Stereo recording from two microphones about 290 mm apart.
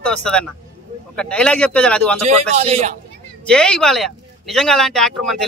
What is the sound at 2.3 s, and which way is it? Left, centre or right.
Speech, right.